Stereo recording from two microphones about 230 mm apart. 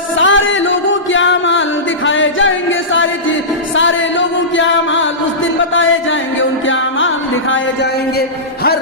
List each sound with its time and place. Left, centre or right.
0.2 s music: left